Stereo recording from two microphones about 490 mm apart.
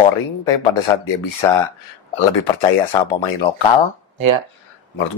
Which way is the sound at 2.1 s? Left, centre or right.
Left.